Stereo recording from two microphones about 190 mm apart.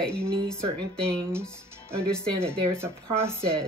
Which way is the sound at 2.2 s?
15° right (ahead or behind).